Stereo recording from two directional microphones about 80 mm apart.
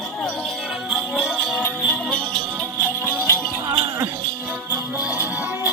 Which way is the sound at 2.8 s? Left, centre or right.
Centre.